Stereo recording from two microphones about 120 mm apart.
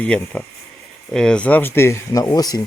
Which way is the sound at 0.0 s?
10° left (ahead or behind).